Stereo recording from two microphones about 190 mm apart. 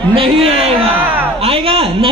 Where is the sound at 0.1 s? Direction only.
30° right (ahead or behind).